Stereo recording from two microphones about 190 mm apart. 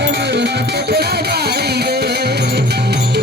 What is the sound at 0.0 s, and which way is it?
Music, 65° right (ahead or behind).